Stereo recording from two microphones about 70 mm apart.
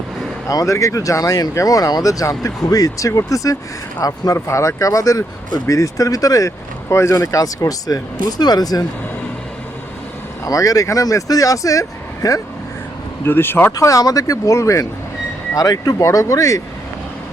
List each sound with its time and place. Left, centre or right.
0.4 s speech: left
4.4 s speech: left
6.9 s speech: left
10.4 s speech: left
13.2 s speech: left
13.7 s speech: left
15.5 s speech: left
16.0 s speech: left